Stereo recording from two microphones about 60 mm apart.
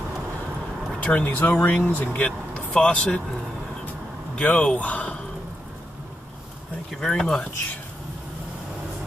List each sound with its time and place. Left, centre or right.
1.0 s speech: left
4.4 s speech: centre
6.9 s speech: centre